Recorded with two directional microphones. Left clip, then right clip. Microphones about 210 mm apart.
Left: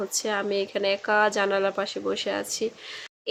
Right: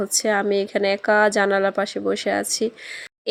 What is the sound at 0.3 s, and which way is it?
Speech, 30° right (ahead or behind).